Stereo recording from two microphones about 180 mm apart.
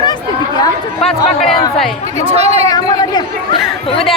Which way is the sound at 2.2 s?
35° right (ahead or behind).